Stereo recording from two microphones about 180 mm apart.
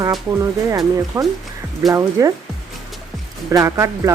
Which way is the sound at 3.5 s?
15° right (ahead or behind).